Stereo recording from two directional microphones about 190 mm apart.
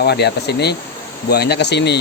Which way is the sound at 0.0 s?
60° left (ahead or behind).